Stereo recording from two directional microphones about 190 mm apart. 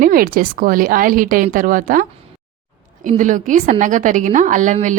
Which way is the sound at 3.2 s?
40° right (ahead or behind).